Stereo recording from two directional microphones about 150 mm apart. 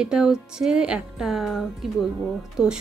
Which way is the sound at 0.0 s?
5° right (ahead or behind).